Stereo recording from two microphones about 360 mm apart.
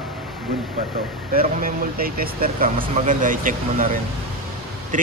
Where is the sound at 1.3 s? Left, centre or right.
Right.